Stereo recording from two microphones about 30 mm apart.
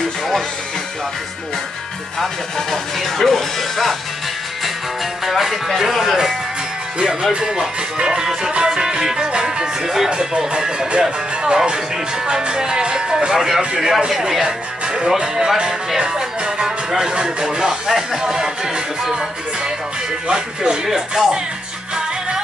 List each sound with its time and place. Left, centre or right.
2.7 s speech: centre
5.2 s speech: centre
7.0 s music: right
13.7 s speech: centre
15.1 s music: right
20.2 s speech: right
20.8 s music: right